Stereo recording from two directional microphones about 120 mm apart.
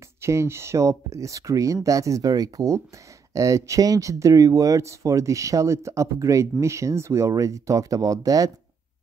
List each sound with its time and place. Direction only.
0.2 s speech: 20° right (ahead or behind)